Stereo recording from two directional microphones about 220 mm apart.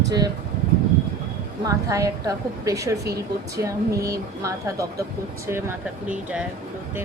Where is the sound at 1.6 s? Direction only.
15° right (ahead or behind).